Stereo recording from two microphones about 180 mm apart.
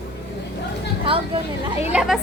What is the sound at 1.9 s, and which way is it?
Speech, 5° right (ahead or behind).